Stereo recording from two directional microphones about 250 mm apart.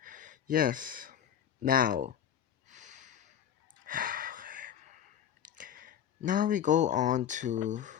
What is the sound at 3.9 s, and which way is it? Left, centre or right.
Gasp, right.